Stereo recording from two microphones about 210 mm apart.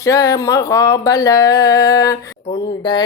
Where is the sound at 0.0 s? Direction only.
15° left (ahead or behind).